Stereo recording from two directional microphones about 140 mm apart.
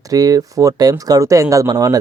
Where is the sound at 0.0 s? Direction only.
25° right (ahead or behind).